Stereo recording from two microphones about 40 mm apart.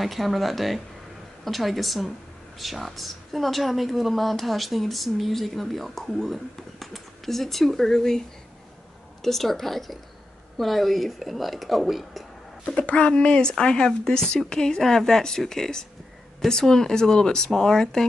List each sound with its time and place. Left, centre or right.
0.0 s a woman's voice: centre
9.2 s a woman's voice: centre
12.9 s speech: left